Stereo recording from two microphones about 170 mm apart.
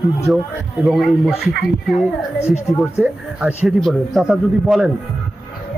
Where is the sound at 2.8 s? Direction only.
5° right (ahead or behind).